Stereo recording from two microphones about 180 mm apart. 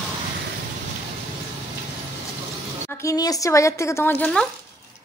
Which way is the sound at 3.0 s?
20° left (ahead or behind).